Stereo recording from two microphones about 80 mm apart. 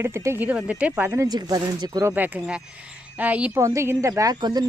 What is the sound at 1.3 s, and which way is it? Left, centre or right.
Speech, right.